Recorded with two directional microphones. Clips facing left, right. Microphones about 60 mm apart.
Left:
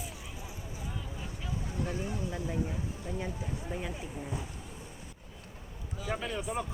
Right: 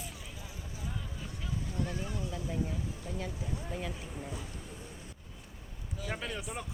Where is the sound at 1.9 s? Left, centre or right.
Left.